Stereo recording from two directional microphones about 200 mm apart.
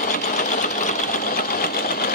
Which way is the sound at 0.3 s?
40° left (ahead or behind).